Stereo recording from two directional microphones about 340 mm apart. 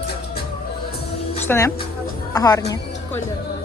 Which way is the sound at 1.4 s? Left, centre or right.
Centre.